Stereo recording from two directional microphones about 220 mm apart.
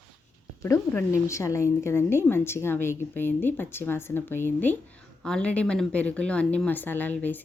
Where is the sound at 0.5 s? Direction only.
15° left (ahead or behind).